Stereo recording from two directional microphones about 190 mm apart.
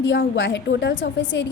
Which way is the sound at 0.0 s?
70° left (ahead or behind).